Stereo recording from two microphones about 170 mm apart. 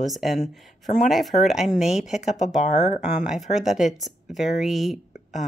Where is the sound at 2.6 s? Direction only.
45° left (ahead or behind).